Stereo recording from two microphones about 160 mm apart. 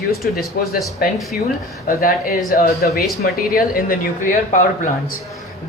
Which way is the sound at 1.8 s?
65° left (ahead or behind).